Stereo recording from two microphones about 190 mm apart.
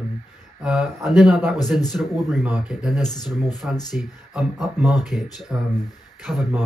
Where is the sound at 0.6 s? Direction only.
5° right (ahead or behind).